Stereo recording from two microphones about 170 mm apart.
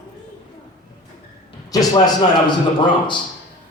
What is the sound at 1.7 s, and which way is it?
Speech, 20° left (ahead or behind).